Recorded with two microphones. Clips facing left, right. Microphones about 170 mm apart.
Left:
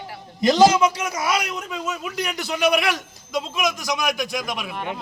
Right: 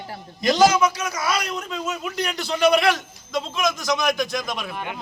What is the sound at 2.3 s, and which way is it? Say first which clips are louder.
A man's voice: right 2 dB; 15° left (ahead or behind).